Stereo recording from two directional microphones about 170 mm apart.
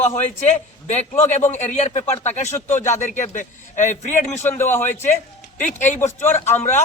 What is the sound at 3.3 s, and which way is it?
Speech, 45° left (ahead or behind).